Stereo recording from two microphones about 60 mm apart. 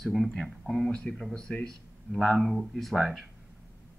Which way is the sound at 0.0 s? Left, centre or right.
Centre.